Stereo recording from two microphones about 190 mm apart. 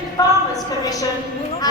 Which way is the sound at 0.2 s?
20° left (ahead or behind).